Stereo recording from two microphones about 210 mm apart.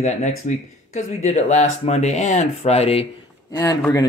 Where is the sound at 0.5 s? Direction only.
30° left (ahead or behind).